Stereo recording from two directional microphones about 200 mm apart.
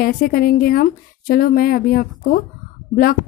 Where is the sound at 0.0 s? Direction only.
50° left (ahead or behind).